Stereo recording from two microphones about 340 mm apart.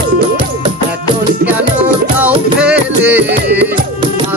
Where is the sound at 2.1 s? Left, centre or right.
Centre.